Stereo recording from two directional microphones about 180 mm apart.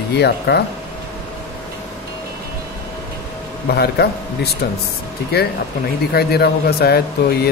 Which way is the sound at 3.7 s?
65° left (ahead or behind).